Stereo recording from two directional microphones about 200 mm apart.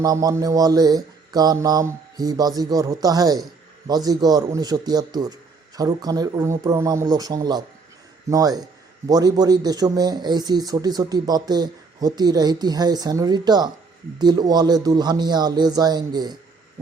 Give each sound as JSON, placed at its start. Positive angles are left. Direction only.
{"t": 0.0, "sound": "a man's voice", "side_deg": -20}